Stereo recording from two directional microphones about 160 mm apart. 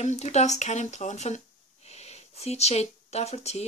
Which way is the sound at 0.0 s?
45° left (ahead or behind).